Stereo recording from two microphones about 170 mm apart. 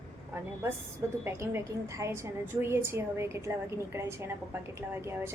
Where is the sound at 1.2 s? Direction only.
15° right (ahead or behind).